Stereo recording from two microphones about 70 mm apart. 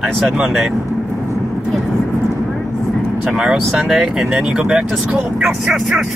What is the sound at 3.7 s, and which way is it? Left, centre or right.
Speech, centre.